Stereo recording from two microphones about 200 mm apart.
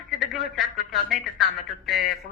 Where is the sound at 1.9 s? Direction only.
50° left (ahead or behind).